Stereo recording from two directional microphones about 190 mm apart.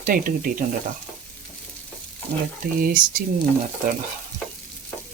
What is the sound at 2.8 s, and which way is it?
Speech, 45° right (ahead or behind).